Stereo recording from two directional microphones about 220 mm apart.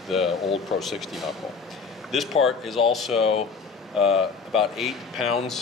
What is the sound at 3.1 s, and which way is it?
Speech, 25° left (ahead or behind).